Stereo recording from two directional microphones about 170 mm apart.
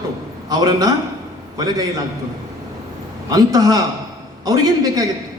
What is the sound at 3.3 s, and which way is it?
A man's voice, 20° right (ahead or behind).